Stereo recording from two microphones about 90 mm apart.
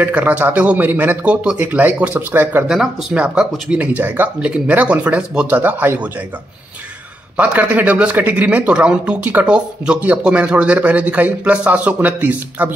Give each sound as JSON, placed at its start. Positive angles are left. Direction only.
{"t": 0.0, "sound": "a man's voice", "side_deg": -15}
{"t": 2.7, "sound": "speech", "side_deg": -10}
{"t": 7.3, "sound": "speech", "side_deg": -15}